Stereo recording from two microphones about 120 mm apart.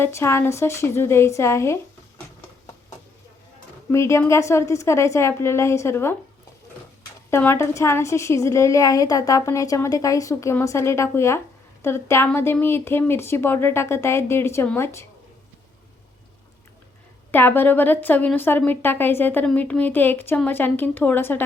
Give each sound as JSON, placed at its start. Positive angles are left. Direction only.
{"t": 0.0, "sound": "a woman's voice", "side_deg": 20}
{"t": 3.9, "sound": "a woman's voice", "side_deg": 25}
{"t": 7.3, "sound": "a woman's voice", "side_deg": 20}
{"t": 17.3, "sound": "a woman's voice", "side_deg": 20}